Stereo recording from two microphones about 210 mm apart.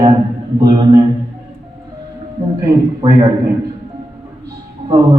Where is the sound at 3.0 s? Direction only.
20° right (ahead or behind).